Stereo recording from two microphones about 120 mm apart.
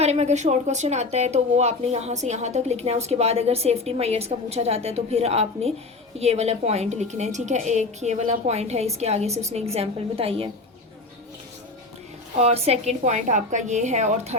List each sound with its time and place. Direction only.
0.0 s a woman's voice: 65° right (ahead or behind)
12.4 s a woman's voice: 60° right (ahead or behind)